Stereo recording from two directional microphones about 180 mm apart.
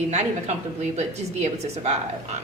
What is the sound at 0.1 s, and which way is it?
A woman's voice, 40° right (ahead or behind).